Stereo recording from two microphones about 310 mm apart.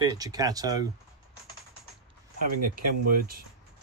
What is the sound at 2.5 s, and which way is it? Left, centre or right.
Speech, right.